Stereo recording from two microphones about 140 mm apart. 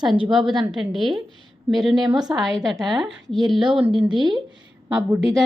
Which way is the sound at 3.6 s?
35° right (ahead or behind).